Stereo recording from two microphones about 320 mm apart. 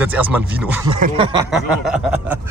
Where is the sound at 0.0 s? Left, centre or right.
Centre.